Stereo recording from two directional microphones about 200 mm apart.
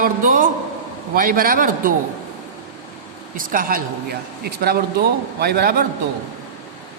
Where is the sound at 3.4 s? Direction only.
45° right (ahead or behind).